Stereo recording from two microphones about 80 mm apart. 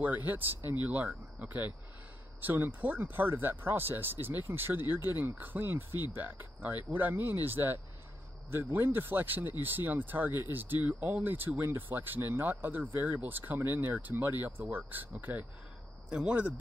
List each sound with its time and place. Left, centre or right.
0.0 s speech: right